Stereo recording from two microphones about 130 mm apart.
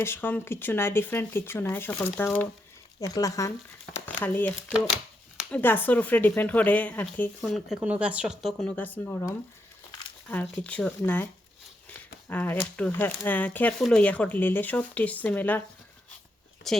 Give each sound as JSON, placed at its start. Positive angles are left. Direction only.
{"t": 0.0, "sound": "speech", "side_deg": 15}
{"t": 3.0, "sound": "speech", "side_deg": 25}
{"t": 4.0, "sound": "speech", "side_deg": 15}
{"t": 7.4, "sound": "speech", "side_deg": 0}
{"t": 12.3, "sound": "speech", "side_deg": 15}
{"t": 16.7, "sound": "speech", "side_deg": 5}